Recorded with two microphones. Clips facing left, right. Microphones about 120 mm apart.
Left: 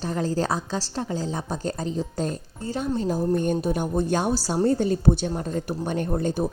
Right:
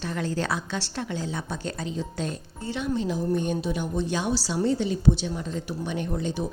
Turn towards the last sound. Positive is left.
turn(degrees=50)  # may be behind; listen again after turning